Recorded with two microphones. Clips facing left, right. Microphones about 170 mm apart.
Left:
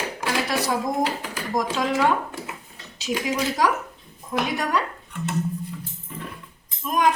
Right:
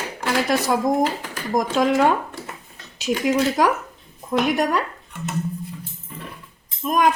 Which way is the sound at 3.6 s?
50° right (ahead or behind).